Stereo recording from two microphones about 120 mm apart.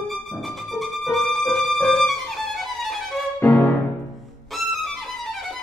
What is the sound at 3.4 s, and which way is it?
Music, 15° left (ahead or behind).